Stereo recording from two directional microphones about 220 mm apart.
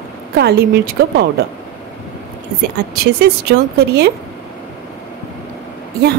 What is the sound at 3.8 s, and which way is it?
Speech, 45° right (ahead or behind).